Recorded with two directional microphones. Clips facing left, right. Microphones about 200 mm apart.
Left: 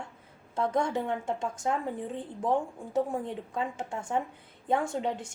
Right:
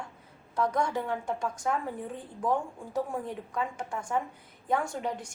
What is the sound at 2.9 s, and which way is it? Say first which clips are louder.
A woman's voice: left 3 dB; 25° left (ahead or behind).